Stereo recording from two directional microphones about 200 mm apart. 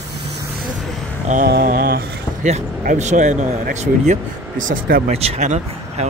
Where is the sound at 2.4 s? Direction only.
35° right (ahead or behind).